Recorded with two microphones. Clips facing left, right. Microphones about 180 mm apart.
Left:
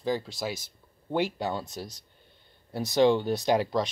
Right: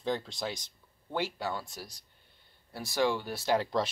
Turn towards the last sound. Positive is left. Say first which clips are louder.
# left 5 dB
turn(degrees=20)  # may be behind; listen again after turning